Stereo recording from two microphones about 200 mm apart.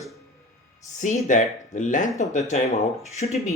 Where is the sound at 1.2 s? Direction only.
40° left (ahead or behind).